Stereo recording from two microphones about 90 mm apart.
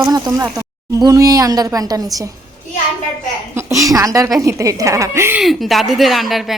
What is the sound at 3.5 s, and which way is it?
Speech, 30° right (ahead or behind).